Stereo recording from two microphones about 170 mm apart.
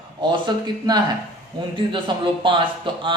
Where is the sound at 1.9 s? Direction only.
30° right (ahead or behind).